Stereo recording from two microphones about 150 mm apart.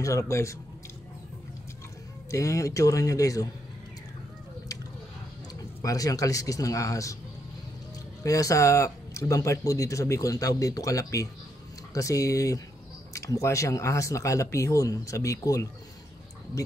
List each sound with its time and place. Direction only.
0.0 s speech: 20° left (ahead or behind)
2.3 s speech: 20° left (ahead or behind)
5.5 s speech: 25° left (ahead or behind)
8.2 s speech: 20° left (ahead or behind)